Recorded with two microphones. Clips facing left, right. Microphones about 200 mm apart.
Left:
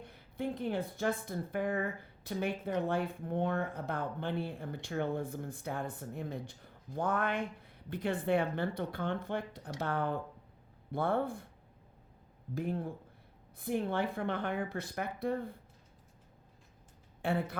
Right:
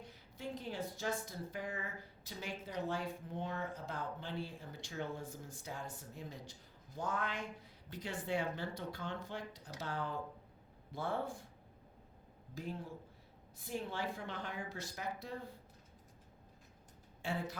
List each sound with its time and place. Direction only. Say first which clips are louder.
0.0 s speech: left 9 dB; 55° left (ahead or behind)
12.5 s speech: left 8 dB; 55° left (ahead or behind)
17.2 s speech: left 7 dB; 55° left (ahead or behind)